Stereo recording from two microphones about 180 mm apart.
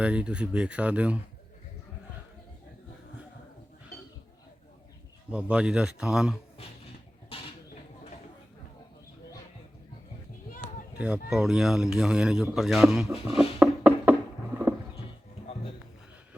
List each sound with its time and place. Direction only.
0.0 s speech: 5° right (ahead or behind)
5.3 s a man's voice: 5° right (ahead or behind)
7.3 s chicken: 30° left (ahead or behind)
10.9 s speech: 5° right (ahead or behind)